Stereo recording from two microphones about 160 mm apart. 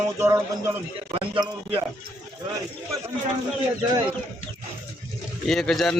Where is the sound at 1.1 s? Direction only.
35° right (ahead or behind).